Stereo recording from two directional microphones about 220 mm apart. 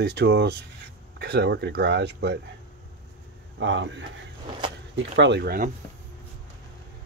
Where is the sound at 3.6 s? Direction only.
55° right (ahead or behind).